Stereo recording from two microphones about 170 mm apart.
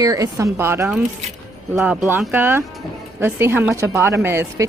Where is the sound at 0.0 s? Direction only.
20° right (ahead or behind).